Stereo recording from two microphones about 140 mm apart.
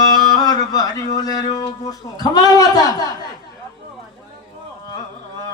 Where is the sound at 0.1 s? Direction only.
30° left (ahead or behind).